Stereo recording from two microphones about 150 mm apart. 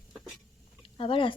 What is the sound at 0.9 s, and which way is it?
Speech, 35° left (ahead or behind).